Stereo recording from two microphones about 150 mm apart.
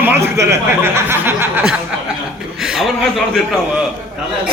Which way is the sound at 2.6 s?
5° right (ahead or behind).